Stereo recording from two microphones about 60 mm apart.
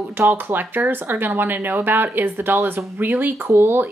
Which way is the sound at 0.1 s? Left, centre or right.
Right.